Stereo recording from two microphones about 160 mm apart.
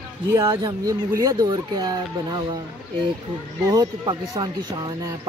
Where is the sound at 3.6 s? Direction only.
25° right (ahead or behind).